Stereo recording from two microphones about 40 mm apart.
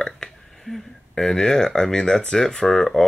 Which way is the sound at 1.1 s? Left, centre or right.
Centre.